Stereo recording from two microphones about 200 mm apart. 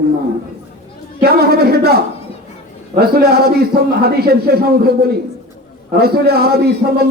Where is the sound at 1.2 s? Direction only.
50° right (ahead or behind).